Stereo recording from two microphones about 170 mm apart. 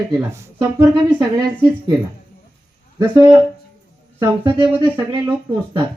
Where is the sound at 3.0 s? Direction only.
15° right (ahead or behind).